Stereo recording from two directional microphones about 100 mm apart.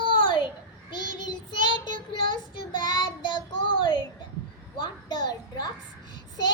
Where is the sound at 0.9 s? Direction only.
50° left (ahead or behind).